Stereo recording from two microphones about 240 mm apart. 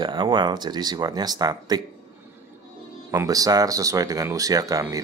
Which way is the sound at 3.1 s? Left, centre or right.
Centre.